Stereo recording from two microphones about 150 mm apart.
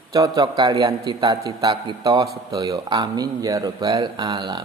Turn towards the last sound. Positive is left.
turn(degrees=-30)  # may be behind; listen again after turning